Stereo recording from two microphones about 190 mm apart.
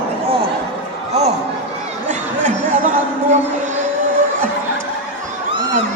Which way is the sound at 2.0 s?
40° right (ahead or behind).